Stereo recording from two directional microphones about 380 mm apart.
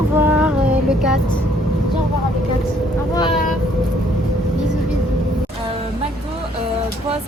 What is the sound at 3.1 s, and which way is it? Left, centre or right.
Vehicle, centre.